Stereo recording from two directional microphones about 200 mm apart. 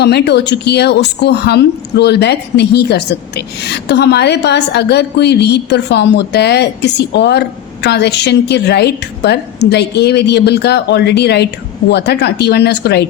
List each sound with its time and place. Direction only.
0.0 s a woman's voice: 55° left (ahead or behind)